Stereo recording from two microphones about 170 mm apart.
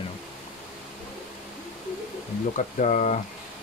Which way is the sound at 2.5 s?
45° left (ahead or behind).